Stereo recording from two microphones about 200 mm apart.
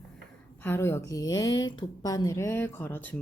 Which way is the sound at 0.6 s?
10° left (ahead or behind).